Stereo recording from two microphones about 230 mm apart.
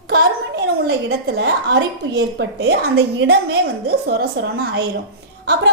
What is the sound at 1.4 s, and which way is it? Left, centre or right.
A woman's voice, right.